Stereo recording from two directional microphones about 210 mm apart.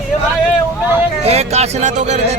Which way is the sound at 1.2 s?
30° right (ahead or behind).